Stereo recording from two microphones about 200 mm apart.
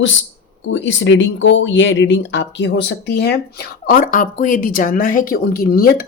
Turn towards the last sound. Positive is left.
turn(degrees=50)  # may be behind; listen again after turning